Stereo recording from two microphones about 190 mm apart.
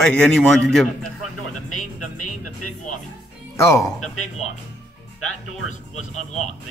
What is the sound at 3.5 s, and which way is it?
Speech, 15° left (ahead or behind).